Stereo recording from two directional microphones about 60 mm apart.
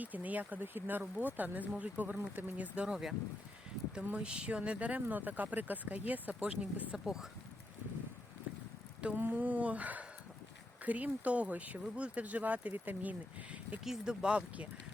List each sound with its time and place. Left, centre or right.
0.0 s speech: right
2.7 s speech: centre
4.0 s speech: right
6.9 s speech: centre
9.1 s speech: right
13.8 s speech: centre